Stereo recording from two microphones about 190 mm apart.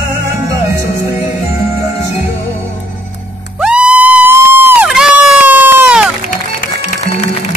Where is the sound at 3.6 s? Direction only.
5° right (ahead or behind).